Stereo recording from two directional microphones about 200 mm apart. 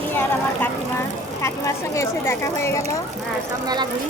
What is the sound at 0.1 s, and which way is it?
Vehicle, 10° left (ahead or behind).